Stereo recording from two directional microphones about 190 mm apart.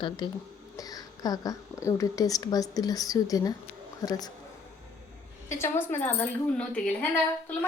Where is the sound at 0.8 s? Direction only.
20° left (ahead or behind).